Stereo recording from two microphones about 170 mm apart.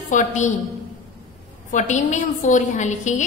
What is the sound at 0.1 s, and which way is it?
Speech, 45° left (ahead or behind).